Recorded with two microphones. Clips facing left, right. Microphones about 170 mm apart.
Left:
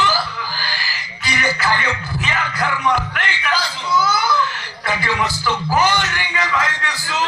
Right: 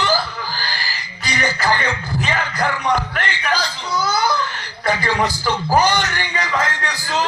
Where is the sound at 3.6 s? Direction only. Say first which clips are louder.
Left 3 dB; 20° right (ahead or behind).